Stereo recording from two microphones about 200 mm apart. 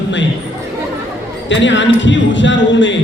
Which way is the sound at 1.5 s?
65° left (ahead or behind).